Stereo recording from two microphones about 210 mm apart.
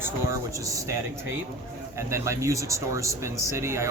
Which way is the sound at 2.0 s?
15° right (ahead or behind).